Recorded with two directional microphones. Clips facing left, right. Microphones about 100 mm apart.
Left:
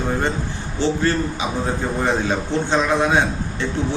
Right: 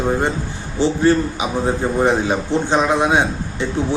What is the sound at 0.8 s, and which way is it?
A man's voice, 15° right (ahead or behind).